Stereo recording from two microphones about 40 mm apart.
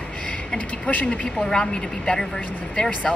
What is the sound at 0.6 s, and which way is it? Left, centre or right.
Speech, left.